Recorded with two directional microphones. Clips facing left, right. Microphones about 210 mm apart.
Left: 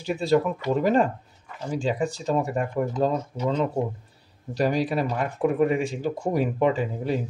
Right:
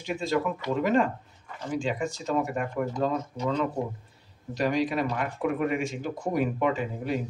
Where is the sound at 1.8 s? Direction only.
35° left (ahead or behind).